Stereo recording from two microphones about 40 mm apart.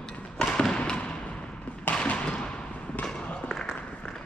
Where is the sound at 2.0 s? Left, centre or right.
Left.